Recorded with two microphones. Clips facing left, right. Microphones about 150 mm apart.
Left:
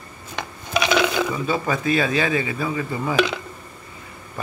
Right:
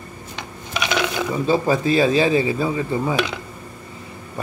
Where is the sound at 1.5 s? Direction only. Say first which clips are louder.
Right 7 dB; 30° right (ahead or behind).